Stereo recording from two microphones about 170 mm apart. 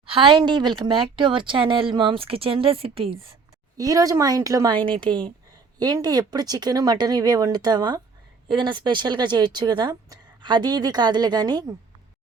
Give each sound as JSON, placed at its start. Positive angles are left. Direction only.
{"t": 0.0, "sound": "speech", "side_deg": -30}
{"t": 3.8, "sound": "speech", "side_deg": -20}